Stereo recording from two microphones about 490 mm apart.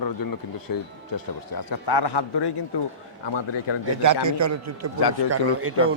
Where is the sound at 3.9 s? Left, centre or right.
Right.